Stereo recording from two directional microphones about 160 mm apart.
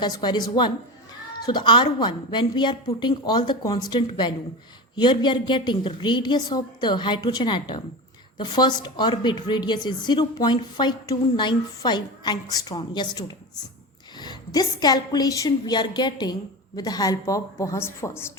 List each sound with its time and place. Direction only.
0.0 s speech: 25° left (ahead or behind)